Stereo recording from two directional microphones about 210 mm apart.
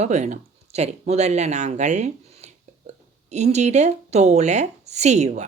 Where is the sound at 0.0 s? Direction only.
35° right (ahead or behind).